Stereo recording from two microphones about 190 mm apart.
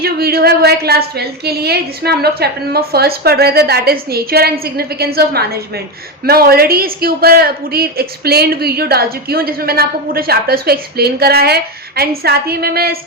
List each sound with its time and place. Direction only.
0.0 s a woman's voice: 55° right (ahead or behind)